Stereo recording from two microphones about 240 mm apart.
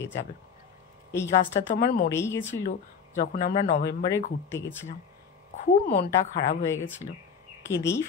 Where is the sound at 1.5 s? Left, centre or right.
Left.